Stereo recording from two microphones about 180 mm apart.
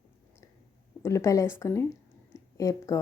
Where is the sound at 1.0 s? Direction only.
15° left (ahead or behind).